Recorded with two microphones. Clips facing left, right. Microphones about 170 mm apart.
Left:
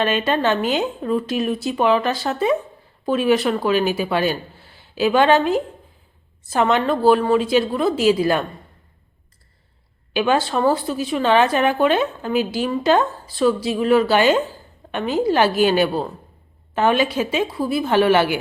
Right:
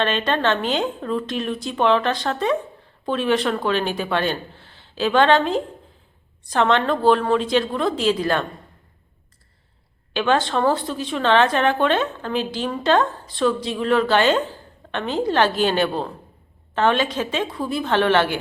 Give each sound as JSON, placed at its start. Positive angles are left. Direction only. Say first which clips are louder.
{"t": 0.0, "sound": "a woman's voice", "louder": "left 2 dB", "side_deg": 10}
{"t": 10.1, "sound": "a woman's voice", "louder": "left 1 dB", "side_deg": 10}